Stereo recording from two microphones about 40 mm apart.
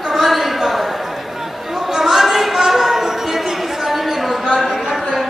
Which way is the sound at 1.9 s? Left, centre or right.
Centre.